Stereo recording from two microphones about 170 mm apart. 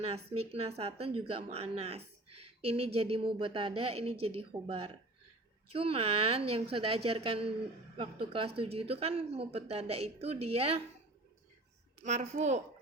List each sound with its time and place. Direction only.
0.0 s speech: 35° right (ahead or behind)
12.0 s a woman's voice: 45° right (ahead or behind)